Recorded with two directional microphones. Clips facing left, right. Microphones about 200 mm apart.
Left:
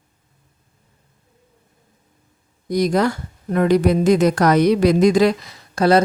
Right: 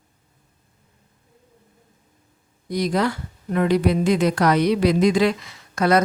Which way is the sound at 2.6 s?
45° left (ahead or behind).